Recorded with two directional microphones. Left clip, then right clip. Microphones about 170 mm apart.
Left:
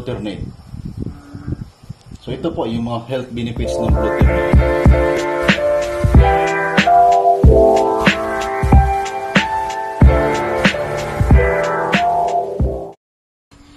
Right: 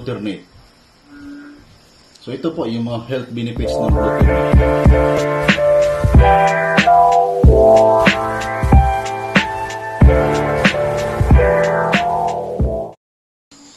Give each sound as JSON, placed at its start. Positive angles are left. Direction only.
{"t": 2.4, "sound": "speech", "side_deg": -25}
{"t": 4.1, "sound": "music", "side_deg": 0}